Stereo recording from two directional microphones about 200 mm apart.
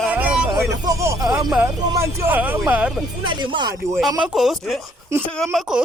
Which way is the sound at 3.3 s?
25° right (ahead or behind).